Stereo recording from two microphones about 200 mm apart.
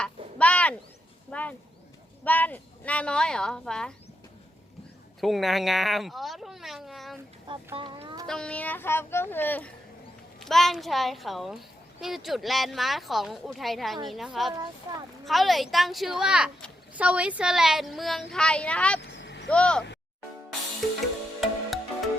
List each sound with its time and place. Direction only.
0.0 s a sound: 5° left (ahead or behind)
1.3 s a woman's voice: 5° left (ahead or behind)
5.2 s a woman's voice: centre (ahead or behind)
7.8 s speech: 25° right (ahead or behind)
8.3 s a woman's voice: 5° left (ahead or behind)
18.9 s vehicle: 60° left (ahead or behind)
19.5 s a woman's voice: 5° left (ahead or behind)
21.4 s music: centre (ahead or behind)